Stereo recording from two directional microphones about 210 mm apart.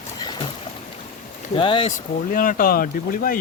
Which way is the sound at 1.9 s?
40° left (ahead or behind).